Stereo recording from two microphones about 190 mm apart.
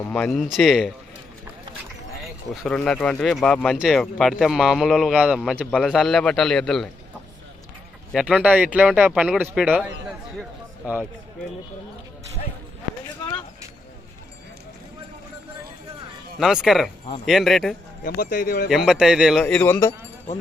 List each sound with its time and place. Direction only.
0.1 s speech: 5° left (ahead or behind)
2.5 s speech: 5° left (ahead or behind)
8.1 s speech: 5° right (ahead or behind)
16.4 s speech: centre (ahead or behind)
18.0 s speech: 45° left (ahead or behind)
18.7 s speech: centre (ahead or behind); by 19.9 s 15° left (ahead or behind)